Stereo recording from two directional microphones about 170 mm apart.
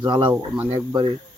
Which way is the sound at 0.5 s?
10° right (ahead or behind).